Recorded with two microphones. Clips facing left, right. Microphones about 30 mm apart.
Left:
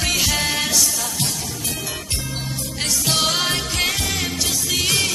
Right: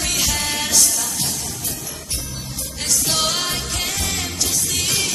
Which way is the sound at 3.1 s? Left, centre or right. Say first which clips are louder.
Left 4 dB; centre.